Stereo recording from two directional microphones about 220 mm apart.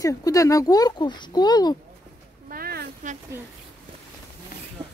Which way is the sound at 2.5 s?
45° right (ahead or behind).